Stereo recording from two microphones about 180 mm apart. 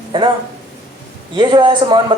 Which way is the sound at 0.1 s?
30° right (ahead or behind).